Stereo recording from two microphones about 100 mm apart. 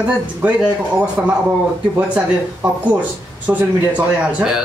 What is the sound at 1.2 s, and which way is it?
A man's voice, 15° right (ahead or behind).